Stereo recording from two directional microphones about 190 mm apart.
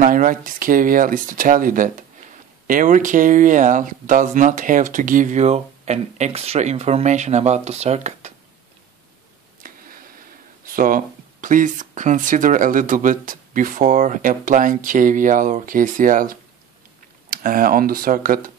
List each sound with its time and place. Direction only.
0.0 s speech: 45° right (ahead or behind)
9.6 s a sound: 45° right (ahead or behind)
11.4 s speech: 45° right (ahead or behind)